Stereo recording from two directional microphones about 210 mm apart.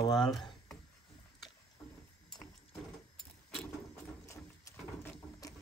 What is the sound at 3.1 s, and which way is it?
Vehicle, centre (ahead or behind).